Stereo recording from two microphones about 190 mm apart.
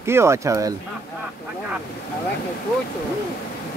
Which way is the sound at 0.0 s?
15° right (ahead or behind).